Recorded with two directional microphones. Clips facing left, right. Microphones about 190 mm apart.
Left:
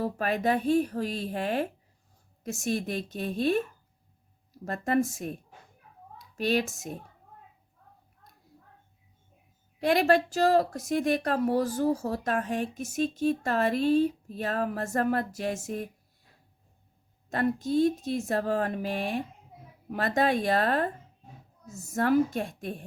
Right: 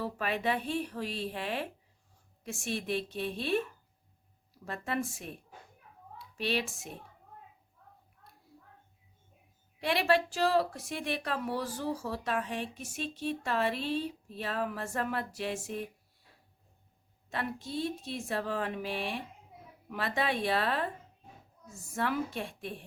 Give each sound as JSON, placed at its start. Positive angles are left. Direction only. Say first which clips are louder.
{"t": 0.0, "sound": "a woman's voice", "louder": "left 5 dB", "side_deg": 40}
{"t": 4.6, "sound": "a woman's voice", "louder": "left 8 dB", "side_deg": 45}
{"t": 9.8, "sound": "a woman's voice", "louder": "left 5 dB", "side_deg": 45}
{"t": 17.2, "sound": "a woman's voice", "louder": "left 10 dB", "side_deg": 45}